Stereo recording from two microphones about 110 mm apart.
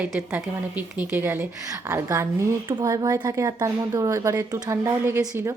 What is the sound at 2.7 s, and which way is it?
A woman's voice, 40° right (ahead or behind).